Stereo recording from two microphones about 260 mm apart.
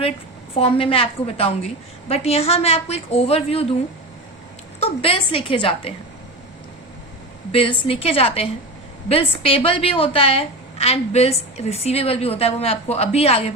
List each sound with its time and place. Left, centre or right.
0.5 s a woman's voice: left
4.8 s a woman's voice: left
7.5 s a woman's voice: left